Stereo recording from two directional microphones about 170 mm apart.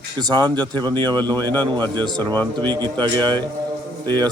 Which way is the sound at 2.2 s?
10° left (ahead or behind).